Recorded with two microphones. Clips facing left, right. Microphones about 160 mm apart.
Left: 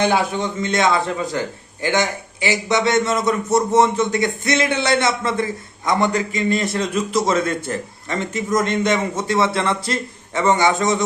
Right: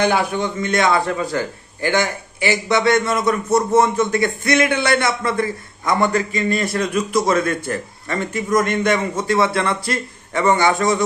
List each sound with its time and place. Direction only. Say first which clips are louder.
0.0 s a man's voice: even; 25° left (ahead or behind)